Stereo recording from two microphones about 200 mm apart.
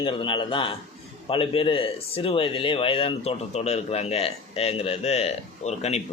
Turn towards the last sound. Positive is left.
turn(degrees=35)  # may be behind; listen again after turning